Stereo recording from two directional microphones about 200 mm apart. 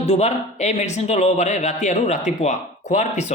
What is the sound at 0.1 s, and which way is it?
Speech, 35° left (ahead or behind).